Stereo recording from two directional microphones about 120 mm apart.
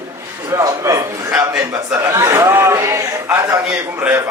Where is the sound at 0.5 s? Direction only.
25° right (ahead or behind).